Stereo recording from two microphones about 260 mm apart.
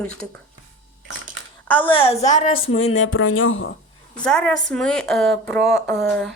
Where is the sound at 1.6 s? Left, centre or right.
Centre.